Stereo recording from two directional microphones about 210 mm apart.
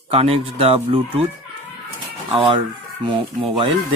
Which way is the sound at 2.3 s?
25° right (ahead or behind).